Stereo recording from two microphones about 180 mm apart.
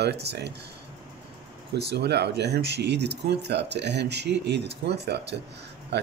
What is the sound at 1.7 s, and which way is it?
Speech, 65° right (ahead or behind).